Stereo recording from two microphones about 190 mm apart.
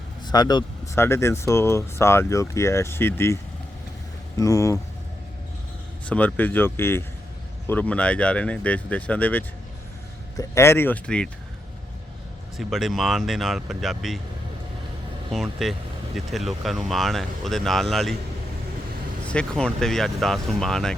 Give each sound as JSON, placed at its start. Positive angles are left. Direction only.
{"t": 0.3, "sound": "speech", "side_deg": 20}
{"t": 4.4, "sound": "speech", "side_deg": 15}
{"t": 6.1, "sound": "speech", "side_deg": 10}
{"t": 12.5, "sound": "speech", "side_deg": 0}
{"t": 15.3, "sound": "speech", "side_deg": 0}
{"t": 19.3, "sound": "speech", "side_deg": 5}